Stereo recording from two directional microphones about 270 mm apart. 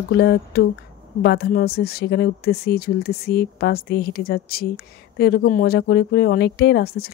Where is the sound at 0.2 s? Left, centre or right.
Left.